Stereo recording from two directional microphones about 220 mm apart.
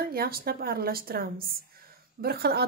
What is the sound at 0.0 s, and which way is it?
A woman's voice, 45° right (ahead or behind).